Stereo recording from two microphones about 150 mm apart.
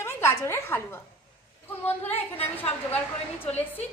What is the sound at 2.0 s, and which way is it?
A woman's voice, 10° left (ahead or behind).